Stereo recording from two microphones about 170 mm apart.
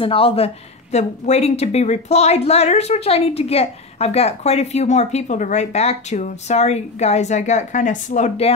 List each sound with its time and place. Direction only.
0.0 s a woman's voice: 35° left (ahead or behind)